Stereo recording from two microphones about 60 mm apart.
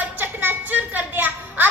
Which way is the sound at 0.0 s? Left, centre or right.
Right.